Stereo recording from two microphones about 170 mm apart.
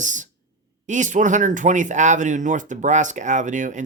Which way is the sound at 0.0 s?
45° right (ahead or behind).